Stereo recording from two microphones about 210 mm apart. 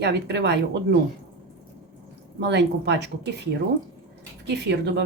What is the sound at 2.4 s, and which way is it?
Speech, 55° right (ahead or behind).